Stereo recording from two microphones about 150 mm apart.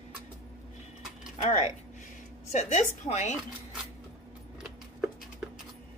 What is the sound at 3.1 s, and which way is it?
Speech, 50° left (ahead or behind).